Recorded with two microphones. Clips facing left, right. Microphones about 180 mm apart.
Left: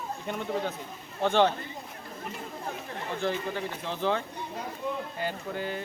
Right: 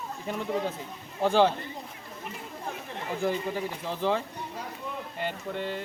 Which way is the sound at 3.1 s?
5° right (ahead or behind).